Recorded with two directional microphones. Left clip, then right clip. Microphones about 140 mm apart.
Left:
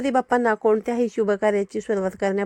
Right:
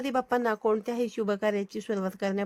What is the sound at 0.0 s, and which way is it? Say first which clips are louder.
Speech: left 7 dB; 35° left (ahead or behind).